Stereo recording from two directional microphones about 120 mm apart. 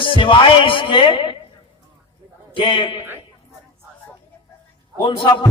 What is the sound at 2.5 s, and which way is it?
Music, 45° left (ahead or behind).